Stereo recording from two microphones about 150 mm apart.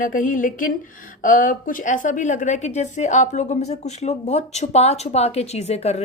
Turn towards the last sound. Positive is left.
turn(degrees=45)  # may be behind; listen again after turning